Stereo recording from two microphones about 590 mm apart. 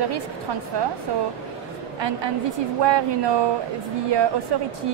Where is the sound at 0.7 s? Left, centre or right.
Right.